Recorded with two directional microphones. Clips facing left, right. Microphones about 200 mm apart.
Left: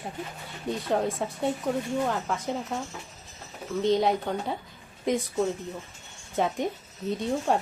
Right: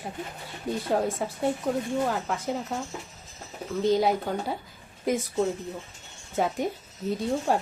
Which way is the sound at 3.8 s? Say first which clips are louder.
Right 1 dB; centre (ahead or behind).